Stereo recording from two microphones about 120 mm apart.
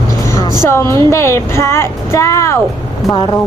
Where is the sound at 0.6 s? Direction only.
20° left (ahead or behind).